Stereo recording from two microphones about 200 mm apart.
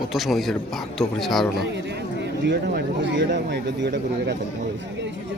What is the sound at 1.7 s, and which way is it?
Speech, 60° right (ahead or behind).